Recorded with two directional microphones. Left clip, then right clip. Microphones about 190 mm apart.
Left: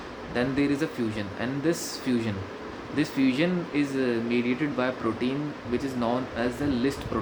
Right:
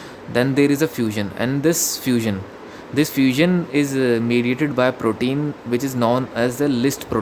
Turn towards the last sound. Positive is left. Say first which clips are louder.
# right 8 dB
turn(degrees=-60)  # may be behind; listen again after turning